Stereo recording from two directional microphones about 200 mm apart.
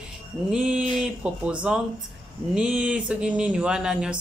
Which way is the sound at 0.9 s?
5° right (ahead or behind).